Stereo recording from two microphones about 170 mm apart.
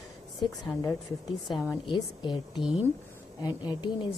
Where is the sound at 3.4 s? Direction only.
25° left (ahead or behind).